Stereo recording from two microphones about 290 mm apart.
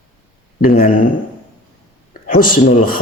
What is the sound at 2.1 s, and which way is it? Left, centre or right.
Speech, left.